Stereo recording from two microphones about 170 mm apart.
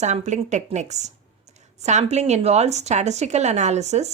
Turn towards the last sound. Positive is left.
turn(degrees=-40)  # may be behind; listen again after turning